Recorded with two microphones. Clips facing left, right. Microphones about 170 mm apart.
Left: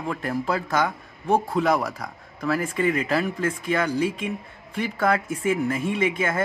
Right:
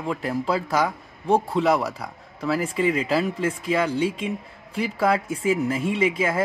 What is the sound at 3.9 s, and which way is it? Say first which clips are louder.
Speech: even; 30° right (ahead or behind).